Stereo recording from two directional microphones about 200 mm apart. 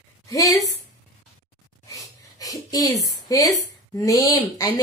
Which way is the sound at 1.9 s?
15° left (ahead or behind).